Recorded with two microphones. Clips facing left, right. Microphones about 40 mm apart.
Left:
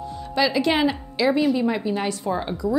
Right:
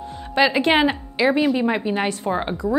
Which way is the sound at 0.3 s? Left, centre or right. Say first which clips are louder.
Right 3 dB; right.